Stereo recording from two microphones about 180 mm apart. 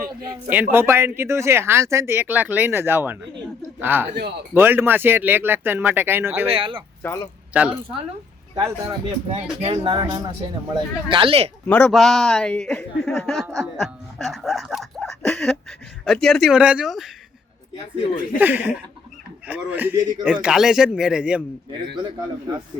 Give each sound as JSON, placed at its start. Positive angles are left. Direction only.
{"t": 0.5, "sound": "speech", "side_deg": -10}
{"t": 4.1, "sound": "speech", "side_deg": -65}
{"t": 4.5, "sound": "speech", "side_deg": -10}
{"t": 6.5, "sound": "speech", "side_deg": -30}
{"t": 7.0, "sound": "speech", "side_deg": 10}
{"t": 7.5, "sound": "a woman's voice", "side_deg": -5}
{"t": 8.5, "sound": "speech", "side_deg": -25}
{"t": 11.7, "sound": "speech", "side_deg": 5}
{"t": 18.3, "sound": "speech", "side_deg": -10}